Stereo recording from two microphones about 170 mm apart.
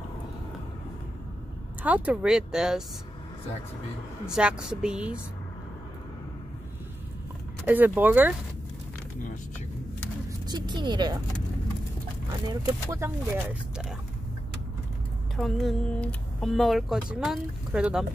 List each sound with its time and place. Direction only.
1.8 s speech: 10° right (ahead or behind)
4.3 s speech: 5° right (ahead or behind)
7.6 s speech: 10° right (ahead or behind)
10.5 s speech: 25° right (ahead or behind)
12.4 s speech: 15° right (ahead or behind)
15.3 s speech: centre (ahead or behind)